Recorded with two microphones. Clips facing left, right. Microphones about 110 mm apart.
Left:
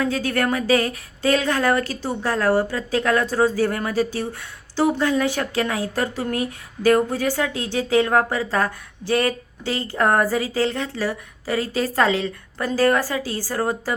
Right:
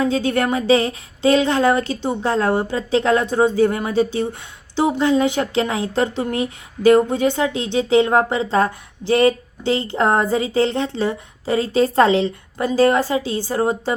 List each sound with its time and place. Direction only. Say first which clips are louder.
0.0 s speech: right 3 dB; 20° right (ahead or behind)